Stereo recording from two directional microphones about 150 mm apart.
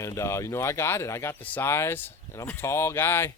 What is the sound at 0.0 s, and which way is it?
Speech, 20° left (ahead or behind).